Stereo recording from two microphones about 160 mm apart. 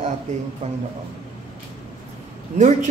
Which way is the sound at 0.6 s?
45° right (ahead or behind).